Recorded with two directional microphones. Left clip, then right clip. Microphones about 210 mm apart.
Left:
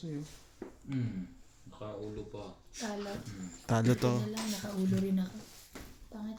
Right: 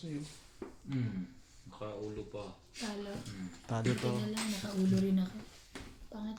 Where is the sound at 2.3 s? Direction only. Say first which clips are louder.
Right 1 dB; 30° left (ahead or behind).